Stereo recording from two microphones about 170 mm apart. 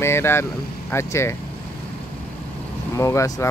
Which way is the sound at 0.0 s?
15° left (ahead or behind).